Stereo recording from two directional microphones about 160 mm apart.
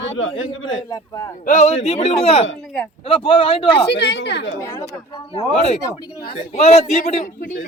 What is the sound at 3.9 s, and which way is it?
Speech, 90° left.